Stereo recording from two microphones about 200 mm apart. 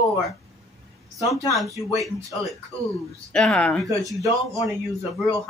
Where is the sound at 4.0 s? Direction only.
15° right (ahead or behind).